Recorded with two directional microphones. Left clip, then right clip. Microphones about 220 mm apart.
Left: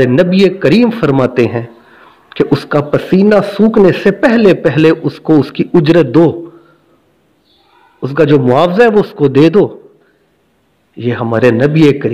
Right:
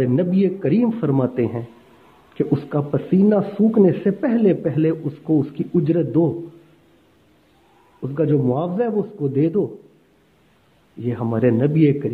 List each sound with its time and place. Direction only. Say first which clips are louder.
0.0 s a man's voice: left 11 dB; 25° left (ahead or behind)
8.0 s a man's voice: left 11 dB; 25° left (ahead or behind)
11.0 s a man's voice: left 10 dB; 25° left (ahead or behind)